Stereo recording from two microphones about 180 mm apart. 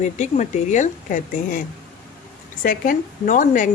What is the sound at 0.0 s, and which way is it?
Speech, 40° left (ahead or behind).